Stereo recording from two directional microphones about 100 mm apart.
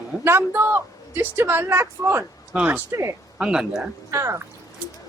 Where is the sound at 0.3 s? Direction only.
20° right (ahead or behind).